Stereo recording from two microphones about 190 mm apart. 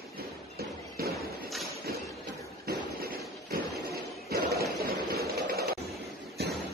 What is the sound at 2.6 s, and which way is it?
Fireworks, 50° right (ahead or behind).